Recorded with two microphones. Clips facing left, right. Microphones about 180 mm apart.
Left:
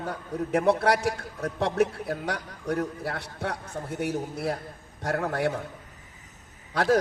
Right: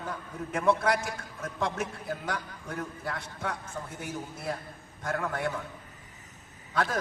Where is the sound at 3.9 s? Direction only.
70° left (ahead or behind).